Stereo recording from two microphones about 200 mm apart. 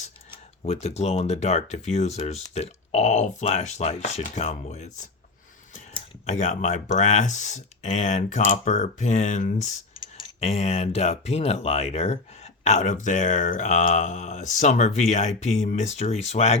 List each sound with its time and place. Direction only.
0.6 s speech: 30° left (ahead or behind)
5.9 s speech: 35° left (ahead or behind)
9.9 s speech: 25° left (ahead or behind)